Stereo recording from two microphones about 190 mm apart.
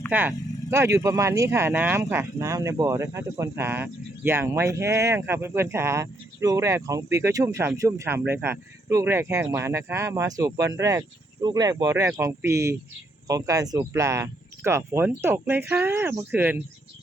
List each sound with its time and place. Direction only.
0.1 s speech: 10° right (ahead or behind)